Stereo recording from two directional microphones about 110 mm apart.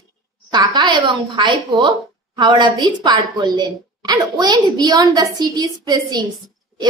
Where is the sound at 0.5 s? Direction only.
40° right (ahead or behind).